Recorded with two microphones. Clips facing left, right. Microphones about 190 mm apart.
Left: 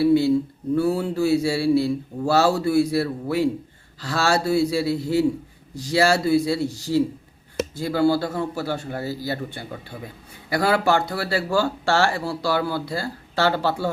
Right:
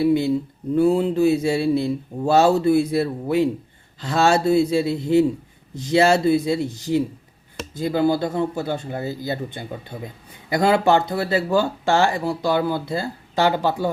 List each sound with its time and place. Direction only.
0.0 s speech: 20° right (ahead or behind)